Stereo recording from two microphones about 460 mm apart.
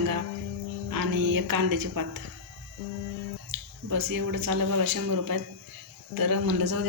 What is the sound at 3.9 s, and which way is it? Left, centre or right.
Speech, right.